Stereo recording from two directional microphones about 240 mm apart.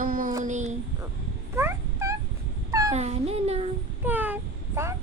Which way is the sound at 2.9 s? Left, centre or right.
Right.